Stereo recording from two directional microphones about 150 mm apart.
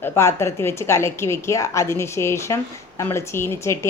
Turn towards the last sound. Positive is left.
turn(degrees=20)  # may be behind; listen again after turning